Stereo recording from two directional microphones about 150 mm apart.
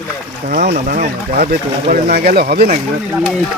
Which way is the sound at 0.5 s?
80° right.